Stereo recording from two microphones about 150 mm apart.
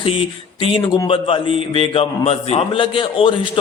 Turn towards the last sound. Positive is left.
turn(degrees=35)  # may be behind; listen again after turning